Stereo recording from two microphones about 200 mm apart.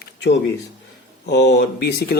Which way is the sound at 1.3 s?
60° left (ahead or behind).